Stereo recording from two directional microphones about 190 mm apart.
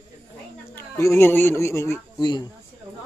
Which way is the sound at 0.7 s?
15° left (ahead or behind).